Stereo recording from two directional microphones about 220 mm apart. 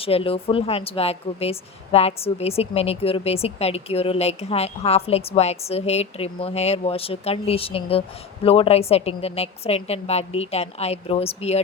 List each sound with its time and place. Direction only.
0.0 s speech: 25° left (ahead or behind)